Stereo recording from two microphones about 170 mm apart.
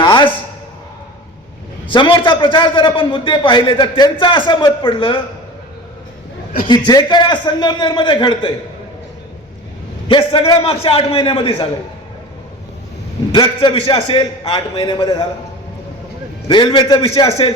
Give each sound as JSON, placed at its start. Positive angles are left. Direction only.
{"t": 0.0, "sound": "a sound", "side_deg": 25}
{"t": 1.9, "sound": "a man's voice", "side_deg": 30}
{"t": 6.7, "sound": "a man's voice", "side_deg": 25}
{"t": 10.1, "sound": "a man's voice", "side_deg": 30}
{"t": 13.3, "sound": "a man's voice", "side_deg": 25}
{"t": 16.5, "sound": "a man's voice", "side_deg": 30}